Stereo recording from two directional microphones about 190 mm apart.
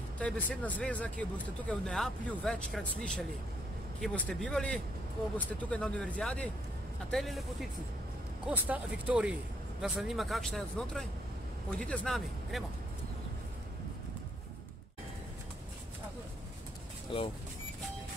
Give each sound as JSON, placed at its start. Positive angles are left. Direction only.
{"t": 0.2, "sound": "speech", "side_deg": 10}
{"t": 4.0, "sound": "speech", "side_deg": 5}
{"t": 8.5, "sound": "speech", "side_deg": -10}
{"t": 17.1, "sound": "speech", "side_deg": 25}